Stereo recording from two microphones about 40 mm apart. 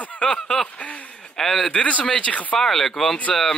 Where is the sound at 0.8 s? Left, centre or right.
Left.